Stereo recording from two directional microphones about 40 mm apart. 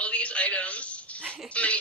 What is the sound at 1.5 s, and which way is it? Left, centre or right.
Music, left.